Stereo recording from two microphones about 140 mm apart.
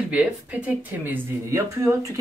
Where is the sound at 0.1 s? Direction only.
10° right (ahead or behind).